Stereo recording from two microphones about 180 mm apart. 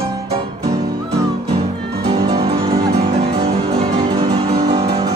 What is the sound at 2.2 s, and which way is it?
Music, 25° right (ahead or behind).